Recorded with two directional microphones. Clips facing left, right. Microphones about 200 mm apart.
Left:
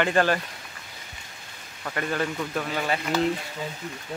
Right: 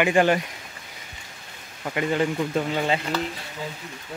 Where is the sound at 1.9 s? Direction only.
20° right (ahead or behind).